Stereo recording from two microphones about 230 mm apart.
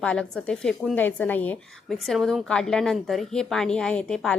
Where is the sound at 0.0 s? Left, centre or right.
Centre.